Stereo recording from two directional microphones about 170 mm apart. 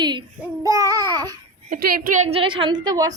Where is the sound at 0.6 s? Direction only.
20° right (ahead or behind).